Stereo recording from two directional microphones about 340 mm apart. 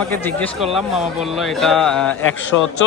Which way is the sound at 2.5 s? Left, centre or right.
Left.